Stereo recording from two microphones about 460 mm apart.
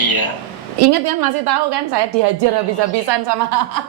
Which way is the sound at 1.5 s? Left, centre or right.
Right.